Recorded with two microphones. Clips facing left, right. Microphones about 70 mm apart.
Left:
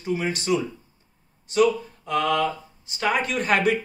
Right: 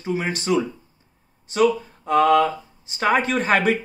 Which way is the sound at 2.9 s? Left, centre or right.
Right.